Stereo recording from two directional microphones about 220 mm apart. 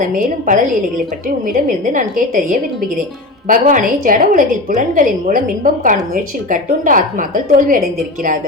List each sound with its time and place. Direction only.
0.0 s a woman's voice: 35° right (ahead or behind)